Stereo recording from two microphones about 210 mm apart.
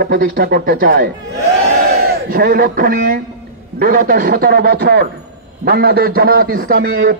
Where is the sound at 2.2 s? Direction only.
45° right (ahead or behind).